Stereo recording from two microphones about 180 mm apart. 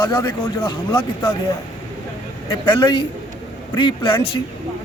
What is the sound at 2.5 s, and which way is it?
Speech, 25° left (ahead or behind).